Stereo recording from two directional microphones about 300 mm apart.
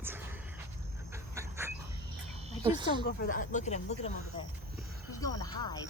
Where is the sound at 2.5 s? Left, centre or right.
Centre.